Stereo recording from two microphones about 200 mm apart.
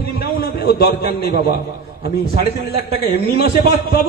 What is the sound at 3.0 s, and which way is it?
Speech, 55° left (ahead or behind).